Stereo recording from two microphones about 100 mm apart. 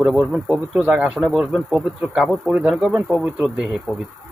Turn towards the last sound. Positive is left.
turn(degrees=-10)  # may be behind; listen again after turning